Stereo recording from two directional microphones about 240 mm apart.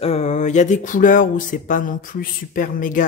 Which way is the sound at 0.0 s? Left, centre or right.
Left.